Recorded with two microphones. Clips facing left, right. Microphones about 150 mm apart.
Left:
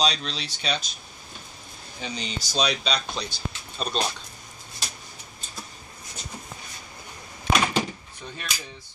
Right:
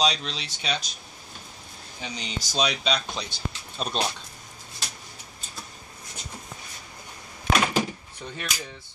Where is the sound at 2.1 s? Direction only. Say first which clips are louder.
Left 1 dB; 20° right (ahead or behind).